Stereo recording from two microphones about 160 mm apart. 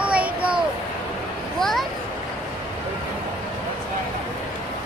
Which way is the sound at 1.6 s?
Centre (ahead or behind).